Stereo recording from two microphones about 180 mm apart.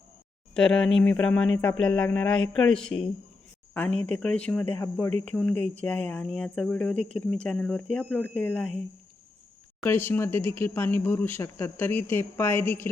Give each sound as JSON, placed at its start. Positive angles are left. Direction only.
{"t": 0.5, "sound": "speech", "side_deg": 5}
{"t": 4.8, "sound": "speech", "side_deg": 15}
{"t": 9.8, "sound": "speech", "side_deg": 10}